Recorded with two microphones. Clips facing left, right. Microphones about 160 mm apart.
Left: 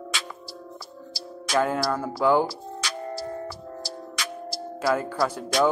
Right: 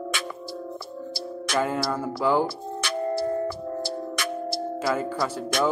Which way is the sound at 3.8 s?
55° right (ahead or behind).